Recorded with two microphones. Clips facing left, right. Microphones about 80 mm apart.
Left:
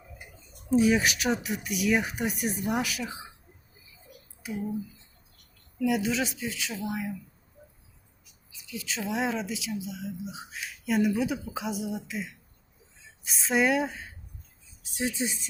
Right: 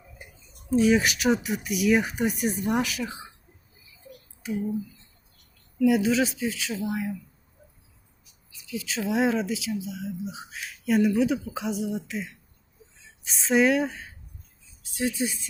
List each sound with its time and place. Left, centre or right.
0.9 s speech: centre
5.8 s speech: centre
8.5 s speech: centre
14.8 s speech: left